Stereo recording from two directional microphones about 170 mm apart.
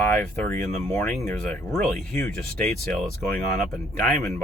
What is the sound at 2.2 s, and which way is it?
Speech, 15° left (ahead or behind).